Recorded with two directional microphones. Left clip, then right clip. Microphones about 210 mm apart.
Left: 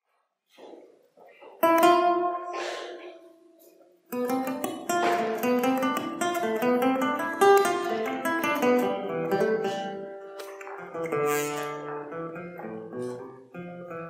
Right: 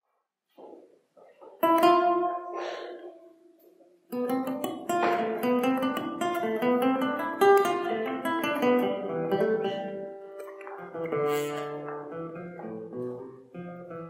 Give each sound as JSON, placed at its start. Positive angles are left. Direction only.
{"t": 1.6, "sound": "music", "side_deg": -20}
{"t": 4.1, "sound": "music", "side_deg": -20}